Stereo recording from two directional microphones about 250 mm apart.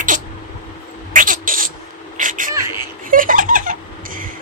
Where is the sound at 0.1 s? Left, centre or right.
Right.